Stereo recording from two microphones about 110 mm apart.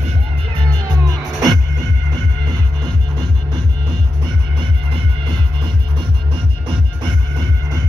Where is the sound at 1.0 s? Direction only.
35° right (ahead or behind).